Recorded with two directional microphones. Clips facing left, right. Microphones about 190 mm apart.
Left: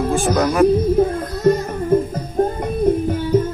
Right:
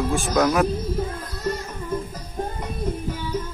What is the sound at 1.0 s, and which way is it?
Music, 55° left (ahead or behind).